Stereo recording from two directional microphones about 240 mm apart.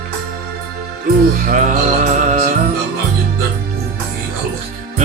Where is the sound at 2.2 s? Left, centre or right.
Right.